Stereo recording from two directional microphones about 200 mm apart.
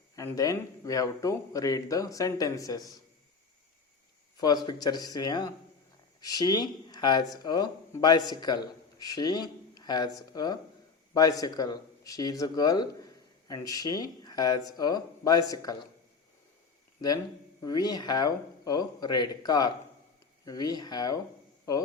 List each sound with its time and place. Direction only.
0.2 s speech: 15° left (ahead or behind)
4.4 s speech: 20° left (ahead or behind)
17.6 s speech: 20° left (ahead or behind)